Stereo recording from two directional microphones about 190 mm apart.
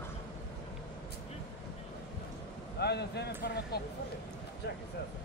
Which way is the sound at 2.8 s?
60° left (ahead or behind).